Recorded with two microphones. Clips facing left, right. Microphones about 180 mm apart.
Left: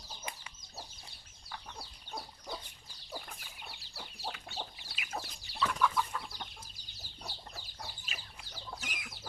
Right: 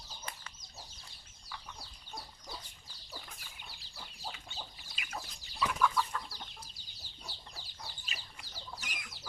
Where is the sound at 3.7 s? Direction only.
70° left (ahead or behind).